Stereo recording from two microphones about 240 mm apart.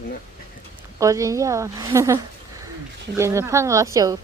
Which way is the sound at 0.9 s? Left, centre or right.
Centre.